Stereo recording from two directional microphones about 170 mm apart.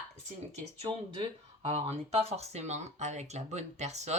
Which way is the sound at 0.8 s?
35° right (ahead or behind).